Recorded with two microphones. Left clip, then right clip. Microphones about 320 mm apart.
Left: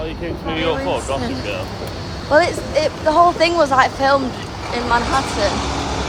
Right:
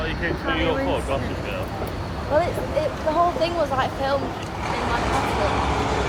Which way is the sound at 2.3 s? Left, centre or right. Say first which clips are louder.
Left 7 dB; left.